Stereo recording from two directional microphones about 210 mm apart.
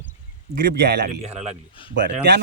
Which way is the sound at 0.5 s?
50° right (ahead or behind).